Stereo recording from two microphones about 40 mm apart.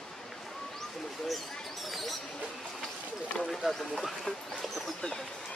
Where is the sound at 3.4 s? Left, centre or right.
Centre.